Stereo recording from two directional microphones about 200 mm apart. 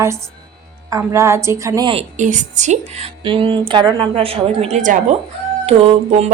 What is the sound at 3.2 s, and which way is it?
A woman's voice, 25° right (ahead or behind).